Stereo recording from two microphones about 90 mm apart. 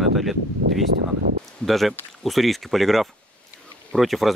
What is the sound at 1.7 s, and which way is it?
Speech, centre (ahead or behind).